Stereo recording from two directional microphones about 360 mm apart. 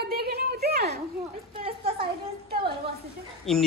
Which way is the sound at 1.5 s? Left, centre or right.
Centre.